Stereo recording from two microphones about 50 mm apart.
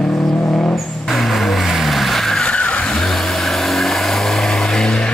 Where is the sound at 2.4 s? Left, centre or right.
Left.